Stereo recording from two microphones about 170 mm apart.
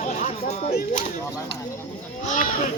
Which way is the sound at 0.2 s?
45° left (ahead or behind).